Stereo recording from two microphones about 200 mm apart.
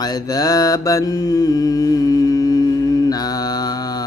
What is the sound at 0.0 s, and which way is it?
Mantra, 20° left (ahead or behind).